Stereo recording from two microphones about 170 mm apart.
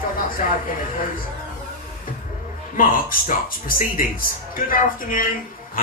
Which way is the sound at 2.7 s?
55° left (ahead or behind).